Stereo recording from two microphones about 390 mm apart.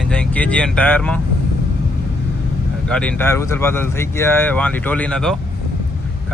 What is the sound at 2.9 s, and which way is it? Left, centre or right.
Speech, centre.